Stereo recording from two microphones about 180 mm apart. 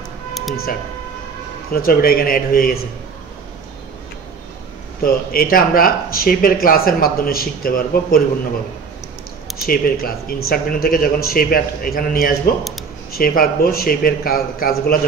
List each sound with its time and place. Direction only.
1.7 s speech: 55° left (ahead or behind)
5.0 s speech: 55° left (ahead or behind)
9.6 s speech: 55° left (ahead or behind)